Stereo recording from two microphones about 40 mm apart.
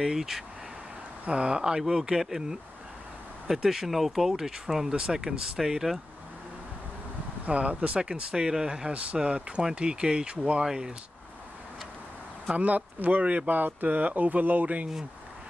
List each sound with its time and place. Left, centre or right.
0.0 s speech: centre
1.2 s speech: right
7.4 s speech: right
8.0 s speech: right
10.6 s speech: centre
12.5 s speech: right
13.5 s speech: right